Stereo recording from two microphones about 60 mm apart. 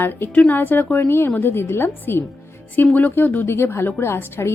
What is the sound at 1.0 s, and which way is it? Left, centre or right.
A woman's voice, left.